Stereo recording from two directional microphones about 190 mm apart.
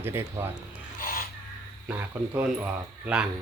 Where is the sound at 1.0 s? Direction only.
50° left (ahead or behind).